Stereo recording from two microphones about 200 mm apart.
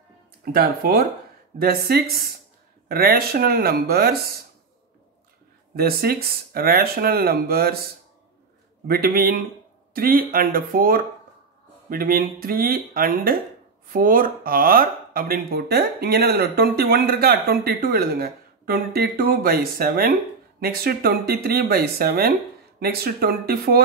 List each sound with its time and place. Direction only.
0.5 s speech: 50° right (ahead or behind)
5.8 s speech: 50° right (ahead or behind)
8.8 s speech: 50° right (ahead or behind)